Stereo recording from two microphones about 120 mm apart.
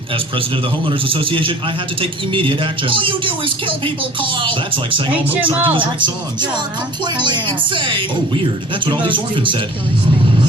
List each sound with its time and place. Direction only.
0.9 s a man's voice: 45° right (ahead or behind)
5.1 s speech: 15° right (ahead or behind)
5.6 s a man's voice: 45° right (ahead or behind)